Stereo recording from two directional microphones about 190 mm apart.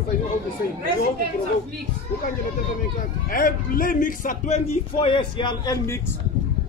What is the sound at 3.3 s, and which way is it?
Speech, 45° left (ahead or behind).